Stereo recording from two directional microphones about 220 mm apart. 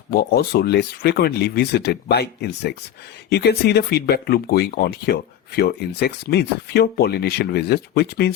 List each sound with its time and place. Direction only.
0.1 s speech: 45° left (ahead or behind)